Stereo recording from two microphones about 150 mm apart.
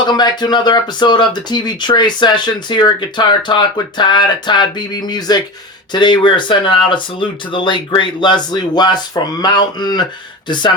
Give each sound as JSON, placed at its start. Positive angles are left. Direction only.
{"t": 0.0, "sound": "speech", "side_deg": 30}